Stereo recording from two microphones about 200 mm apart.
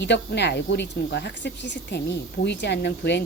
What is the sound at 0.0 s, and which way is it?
Speech, 60° left (ahead or behind).